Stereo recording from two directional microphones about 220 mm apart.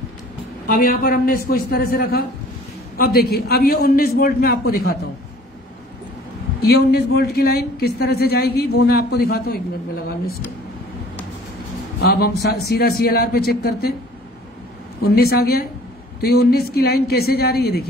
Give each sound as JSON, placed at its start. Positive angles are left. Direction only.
{"t": 0.7, "sound": "a woman's voice", "side_deg": 40}
{"t": 6.6, "sound": "a woman's voice", "side_deg": 45}
{"t": 12.0, "sound": "a woman's voice", "side_deg": 45}
{"t": 15.0, "sound": "a woman's voice", "side_deg": 45}